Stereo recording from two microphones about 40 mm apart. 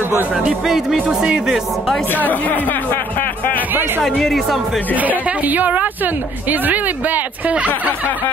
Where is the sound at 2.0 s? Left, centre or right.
Left.